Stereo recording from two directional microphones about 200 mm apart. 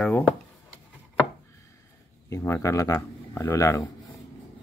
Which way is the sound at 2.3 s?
15° left (ahead or behind).